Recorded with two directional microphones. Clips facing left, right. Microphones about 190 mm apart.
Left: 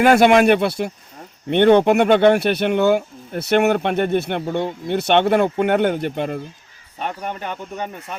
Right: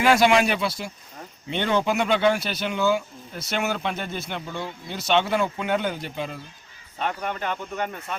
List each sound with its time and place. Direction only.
0.0 s speech: 50° left (ahead or behind)